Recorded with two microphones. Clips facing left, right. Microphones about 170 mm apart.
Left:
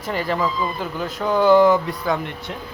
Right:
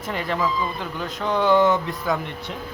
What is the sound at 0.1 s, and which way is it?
Speech, centre (ahead or behind).